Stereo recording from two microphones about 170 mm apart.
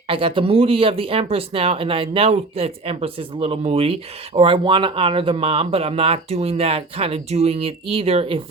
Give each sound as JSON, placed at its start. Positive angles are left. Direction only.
{"t": 0.1, "sound": "speech", "side_deg": -30}